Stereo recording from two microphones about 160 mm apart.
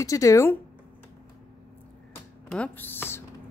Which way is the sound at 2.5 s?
10° left (ahead or behind).